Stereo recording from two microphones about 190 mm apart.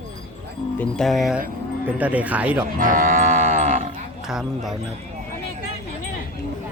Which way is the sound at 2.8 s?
45° right (ahead or behind).